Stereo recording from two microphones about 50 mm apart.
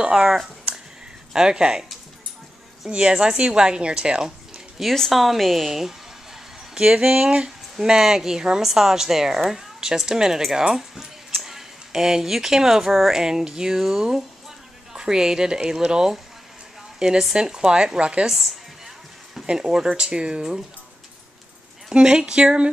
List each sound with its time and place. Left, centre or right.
0.0 s speech: centre
2.9 s speech: centre
4.9 s a woman's voice: centre
18.2 s a woman's voice: centre
21.8 s speech: centre